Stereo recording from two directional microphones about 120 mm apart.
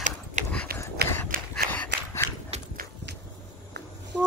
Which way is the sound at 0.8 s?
20° left (ahead or behind).